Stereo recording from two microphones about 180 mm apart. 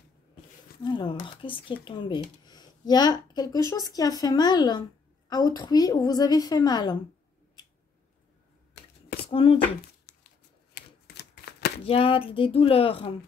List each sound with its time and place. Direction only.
0.8 s speech: 25° left (ahead or behind)
9.2 s speech: 30° left (ahead or behind)
10.1 s a sound: 65° left (ahead or behind)
10.7 s typewriter: 65° left (ahead or behind)
11.8 s speech: 30° left (ahead or behind)